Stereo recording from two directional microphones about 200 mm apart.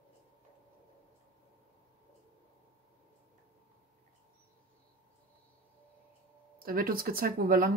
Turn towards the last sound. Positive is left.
turn(degrees=-45)  # may be behind; listen again after turning